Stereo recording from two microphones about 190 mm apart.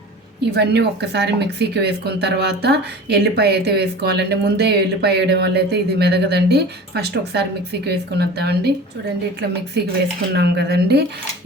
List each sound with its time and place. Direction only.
0.5 s speech: 60° right (ahead or behind)
9.7 s speech: 60° right (ahead or behind)